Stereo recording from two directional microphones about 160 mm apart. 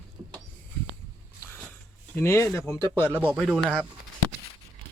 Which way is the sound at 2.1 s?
15° left (ahead or behind).